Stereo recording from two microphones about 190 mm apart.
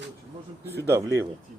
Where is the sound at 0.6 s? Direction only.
10° left (ahead or behind).